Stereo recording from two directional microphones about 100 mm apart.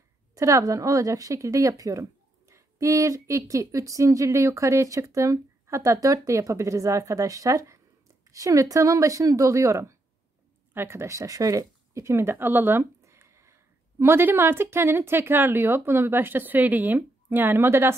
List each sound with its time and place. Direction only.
0.3 s a woman's voice: 30° right (ahead or behind)